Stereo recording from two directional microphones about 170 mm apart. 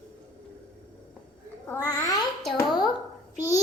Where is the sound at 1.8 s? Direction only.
20° left (ahead or behind).